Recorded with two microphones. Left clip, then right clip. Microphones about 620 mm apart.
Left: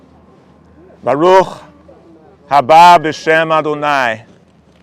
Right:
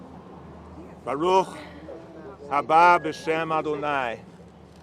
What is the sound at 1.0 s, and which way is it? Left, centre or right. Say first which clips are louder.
A man's voice: left 13 dB; left.